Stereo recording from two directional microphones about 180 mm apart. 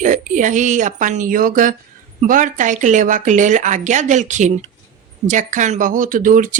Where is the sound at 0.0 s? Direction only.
45° right (ahead or behind).